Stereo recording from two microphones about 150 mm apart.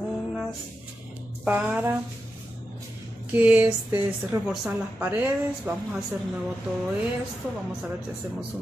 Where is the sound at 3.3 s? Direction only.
10° right (ahead or behind).